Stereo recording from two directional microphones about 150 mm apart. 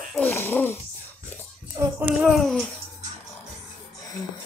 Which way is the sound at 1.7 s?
15° right (ahead or behind).